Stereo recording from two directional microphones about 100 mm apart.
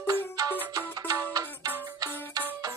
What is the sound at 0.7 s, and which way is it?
Music, 40° right (ahead or behind).